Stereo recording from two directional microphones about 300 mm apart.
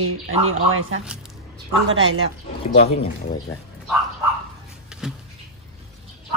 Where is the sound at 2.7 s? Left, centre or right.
Left.